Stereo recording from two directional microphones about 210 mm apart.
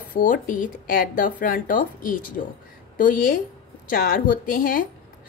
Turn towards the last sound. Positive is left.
turn(degrees=40)  # may be behind; listen again after turning